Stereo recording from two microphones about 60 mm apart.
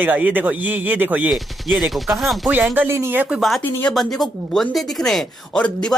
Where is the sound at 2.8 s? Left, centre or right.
Right.